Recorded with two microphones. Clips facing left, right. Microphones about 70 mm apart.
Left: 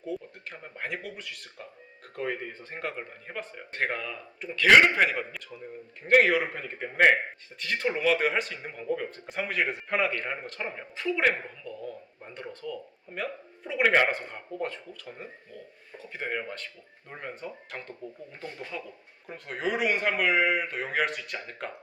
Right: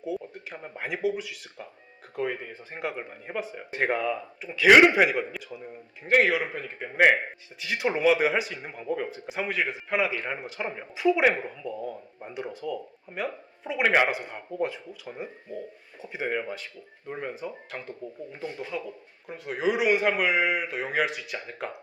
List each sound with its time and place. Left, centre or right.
0.0 s speech: centre